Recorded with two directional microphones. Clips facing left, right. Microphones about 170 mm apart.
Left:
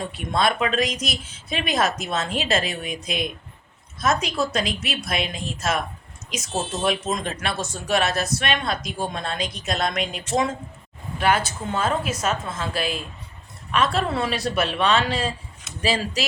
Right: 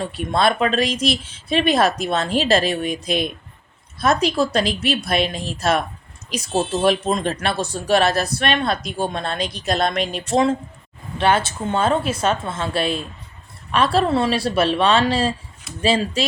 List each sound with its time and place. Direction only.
0.0 s speech: 35° right (ahead or behind)
11.2 s a woman's voice: 25° right (ahead or behind)